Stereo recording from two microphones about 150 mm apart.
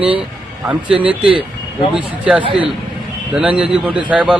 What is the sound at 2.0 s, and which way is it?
Speech, 5° right (ahead or behind).